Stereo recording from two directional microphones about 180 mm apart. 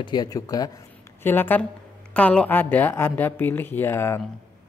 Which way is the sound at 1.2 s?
10° left (ahead or behind).